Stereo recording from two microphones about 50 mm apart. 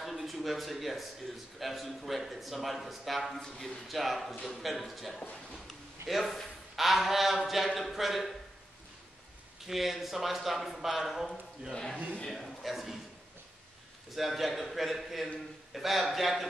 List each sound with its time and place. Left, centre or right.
0.0 s a sound: centre
1.6 s speech: centre
9.7 s speech: centre
11.7 s speech: centre
12.3 s speech: centre
14.1 s speech: centre